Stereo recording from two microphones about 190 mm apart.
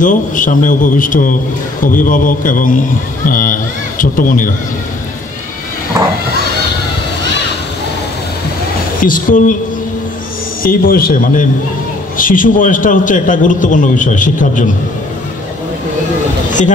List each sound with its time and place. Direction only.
0.0 s a man's voice: 45° left (ahead or behind)
6.0 s horse: 20° right (ahead or behind)
9.0 s a man's voice: 45° left (ahead or behind)
10.6 s a man's voice: 50° left (ahead or behind)